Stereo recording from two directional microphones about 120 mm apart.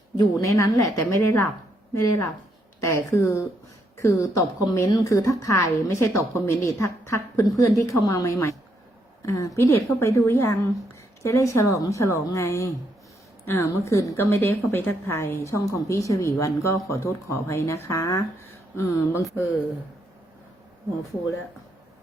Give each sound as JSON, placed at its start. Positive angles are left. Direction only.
{"t": 0.4, "sound": "a woman's voice", "side_deg": 25}